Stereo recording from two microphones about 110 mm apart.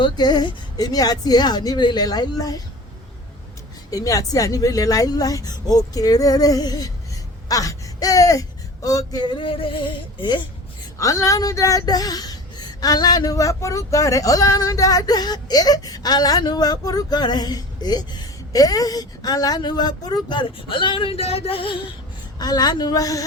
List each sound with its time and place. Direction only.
0.0 s speech: 40° left (ahead or behind)
3.9 s speech: 30° left (ahead or behind); by 10.4 s 45° left (ahead or behind)
11.0 s speech: 30° left (ahead or behind); by 21.8 s 55° left (ahead or behind)
22.4 s speech: 35° left (ahead or behind)